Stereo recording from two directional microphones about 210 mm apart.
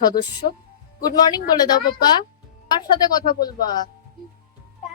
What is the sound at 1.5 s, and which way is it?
A woman's voice, 20° left (ahead or behind).